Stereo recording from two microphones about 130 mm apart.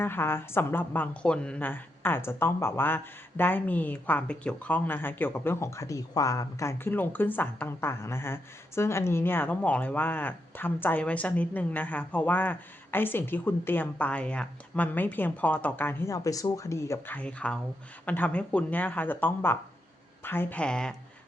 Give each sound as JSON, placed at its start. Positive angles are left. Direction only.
{"t": 0.0, "sound": "a woman's voice", "side_deg": 15}
{"t": 17.2, "sound": "a woman's voice", "side_deg": 10}